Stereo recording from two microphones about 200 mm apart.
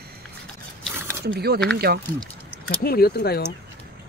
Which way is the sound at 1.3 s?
50° right (ahead or behind).